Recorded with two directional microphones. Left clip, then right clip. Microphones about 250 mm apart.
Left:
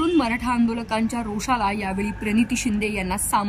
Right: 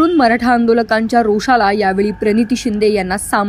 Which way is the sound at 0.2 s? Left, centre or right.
Centre.